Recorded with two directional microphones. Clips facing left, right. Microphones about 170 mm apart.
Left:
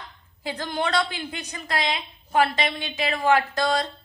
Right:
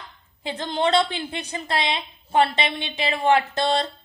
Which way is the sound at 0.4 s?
25° right (ahead or behind).